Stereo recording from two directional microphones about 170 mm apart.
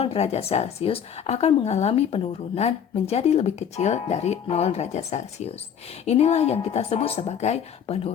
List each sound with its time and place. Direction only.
0.0 s speech: 35° left (ahead or behind)